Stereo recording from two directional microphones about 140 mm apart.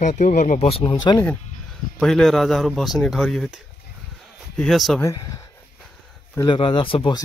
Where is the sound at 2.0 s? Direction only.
5° left (ahead or behind).